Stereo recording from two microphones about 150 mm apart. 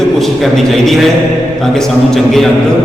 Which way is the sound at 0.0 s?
Centre (ahead or behind).